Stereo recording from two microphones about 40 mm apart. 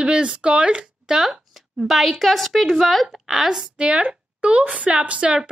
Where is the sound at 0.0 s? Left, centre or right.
Right.